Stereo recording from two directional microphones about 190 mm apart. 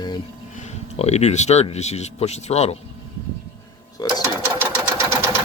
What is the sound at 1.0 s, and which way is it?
Speech, 35° left (ahead or behind).